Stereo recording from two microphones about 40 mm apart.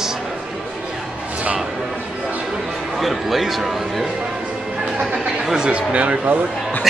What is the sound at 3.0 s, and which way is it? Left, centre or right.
A man's voice, centre.